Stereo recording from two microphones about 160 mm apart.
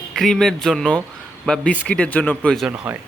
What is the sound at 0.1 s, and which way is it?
Speech, centre (ahead or behind).